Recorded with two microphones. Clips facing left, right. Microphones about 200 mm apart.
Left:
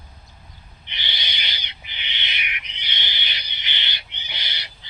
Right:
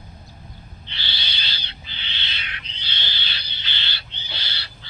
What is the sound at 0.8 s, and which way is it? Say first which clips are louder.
Owl: left 1 dB; 15° left (ahead or behind).